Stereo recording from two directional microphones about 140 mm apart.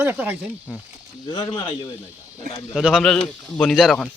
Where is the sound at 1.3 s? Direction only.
35° left (ahead or behind).